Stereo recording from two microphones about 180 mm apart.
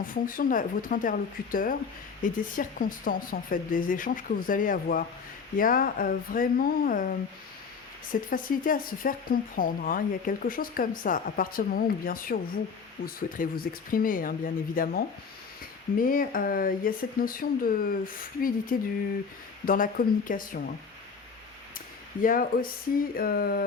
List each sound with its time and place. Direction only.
0.0 s speech: 50° left (ahead or behind)
8.3 s speech: 50° left (ahead or behind)
22.2 s speech: 50° left (ahead or behind)
23.1 s a sound: 55° left (ahead or behind)